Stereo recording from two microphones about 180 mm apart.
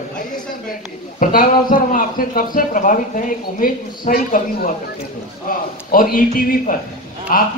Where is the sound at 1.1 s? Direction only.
50° left (ahead or behind).